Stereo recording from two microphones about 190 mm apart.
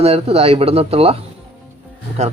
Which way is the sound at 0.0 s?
30° right (ahead or behind).